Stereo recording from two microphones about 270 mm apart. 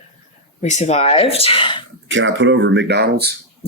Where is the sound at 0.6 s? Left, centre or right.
Left.